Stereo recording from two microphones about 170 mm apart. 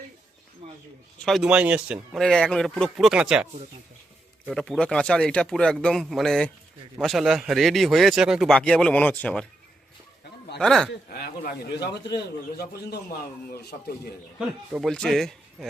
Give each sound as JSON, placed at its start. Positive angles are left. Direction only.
{"t": 0.6, "sound": "a sound", "side_deg": -35}
{"t": 1.2, "sound": "speech", "side_deg": 0}
{"t": 10.6, "sound": "speech", "side_deg": 0}
{"t": 11.1, "sound": "a man's voice", "side_deg": 60}
{"t": 14.3, "sound": "speech", "side_deg": -5}